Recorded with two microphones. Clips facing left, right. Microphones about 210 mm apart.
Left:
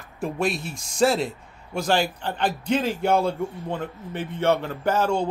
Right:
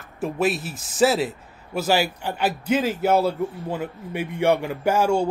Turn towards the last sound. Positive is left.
turn(degrees=-10)  # may be behind; listen again after turning